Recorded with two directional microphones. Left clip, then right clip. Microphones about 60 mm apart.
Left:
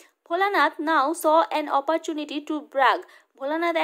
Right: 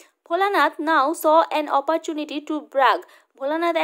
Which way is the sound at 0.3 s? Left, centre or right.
Right.